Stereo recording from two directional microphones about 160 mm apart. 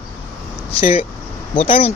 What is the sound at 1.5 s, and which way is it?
Speech, 35° left (ahead or behind).